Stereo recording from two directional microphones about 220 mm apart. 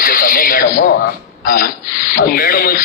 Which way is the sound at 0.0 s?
40° left (ahead or behind).